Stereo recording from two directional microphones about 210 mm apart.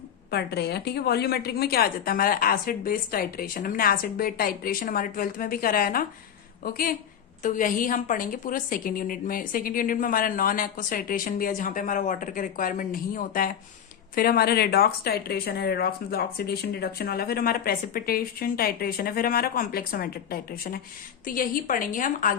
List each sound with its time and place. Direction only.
0.3 s a woman's voice: 50° left (ahead or behind)